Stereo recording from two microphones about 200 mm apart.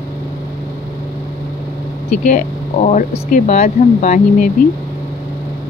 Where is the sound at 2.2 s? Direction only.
40° left (ahead or behind).